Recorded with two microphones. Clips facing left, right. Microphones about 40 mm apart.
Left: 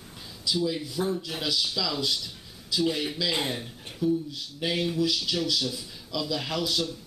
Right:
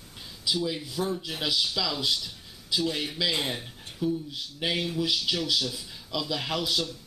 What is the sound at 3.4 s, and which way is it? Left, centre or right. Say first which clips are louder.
A man's voice: left 1 dB; centre.